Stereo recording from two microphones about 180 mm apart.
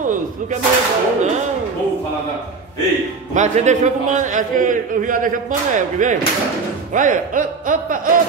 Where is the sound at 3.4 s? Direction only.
40° right (ahead or behind).